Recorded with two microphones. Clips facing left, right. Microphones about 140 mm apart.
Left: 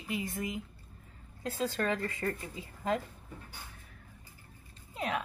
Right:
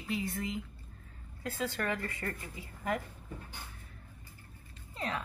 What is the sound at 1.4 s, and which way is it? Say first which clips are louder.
A woman's voice: left 3 dB; 20° left (ahead or behind).